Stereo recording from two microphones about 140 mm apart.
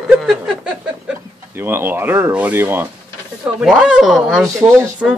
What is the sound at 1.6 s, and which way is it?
Speech, 15° right (ahead or behind).